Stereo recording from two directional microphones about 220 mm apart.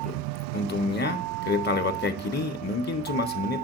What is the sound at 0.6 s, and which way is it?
Speech, 50° left (ahead or behind).